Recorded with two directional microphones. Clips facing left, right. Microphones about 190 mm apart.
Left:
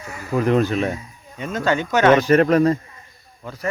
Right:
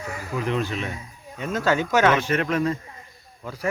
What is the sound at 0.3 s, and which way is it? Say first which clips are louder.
Speech: left 8 dB; 45° left (ahead or behind).